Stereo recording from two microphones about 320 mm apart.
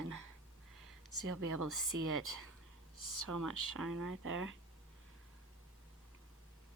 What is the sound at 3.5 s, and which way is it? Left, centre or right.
Speech, right.